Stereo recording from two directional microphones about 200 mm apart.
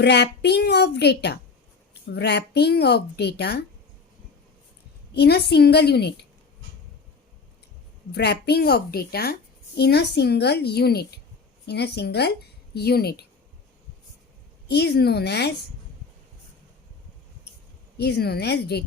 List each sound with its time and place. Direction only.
0.0 s speech: 55° left (ahead or behind)
5.1 s speech: 55° left (ahead or behind)
8.1 s speech: 55° left (ahead or behind)
14.7 s speech: 55° left (ahead or behind)
17.9 s speech: 55° left (ahead or behind)